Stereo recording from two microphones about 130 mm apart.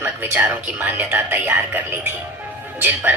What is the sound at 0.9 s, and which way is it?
Speech, 15° right (ahead or behind).